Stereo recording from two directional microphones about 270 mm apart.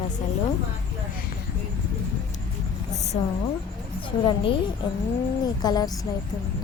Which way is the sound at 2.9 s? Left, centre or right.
Left.